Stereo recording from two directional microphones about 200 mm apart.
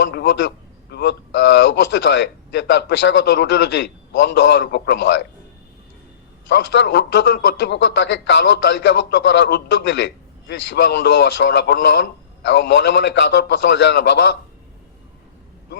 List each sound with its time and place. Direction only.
0.0 s a man's voice: 55° left (ahead or behind)
6.5 s a man's voice: 60° left (ahead or behind)